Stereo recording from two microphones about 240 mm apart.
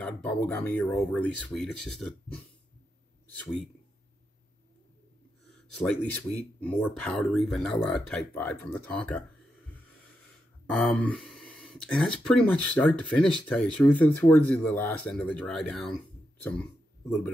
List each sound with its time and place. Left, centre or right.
0.0 s speech: centre
5.5 s speech: centre
10.7 s speech: centre